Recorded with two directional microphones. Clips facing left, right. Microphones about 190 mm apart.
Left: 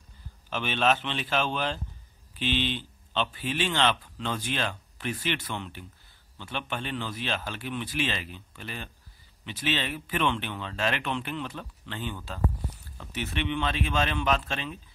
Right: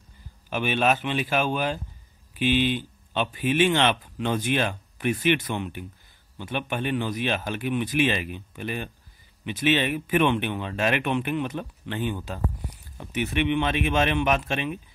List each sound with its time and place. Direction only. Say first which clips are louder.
0.5 s speech: right 3 dB; 10° right (ahead or behind)